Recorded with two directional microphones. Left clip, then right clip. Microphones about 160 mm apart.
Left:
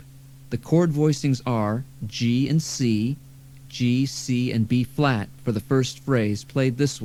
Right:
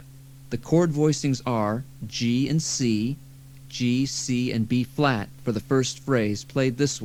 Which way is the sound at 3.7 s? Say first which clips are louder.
Left 1 dB; 25° left (ahead or behind).